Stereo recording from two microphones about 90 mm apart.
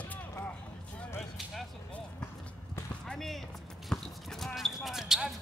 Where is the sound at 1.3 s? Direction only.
Centre (ahead or behind).